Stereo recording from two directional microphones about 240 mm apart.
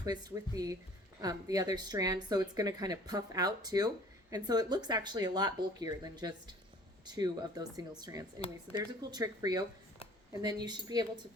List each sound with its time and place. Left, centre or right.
0.0 s speech: centre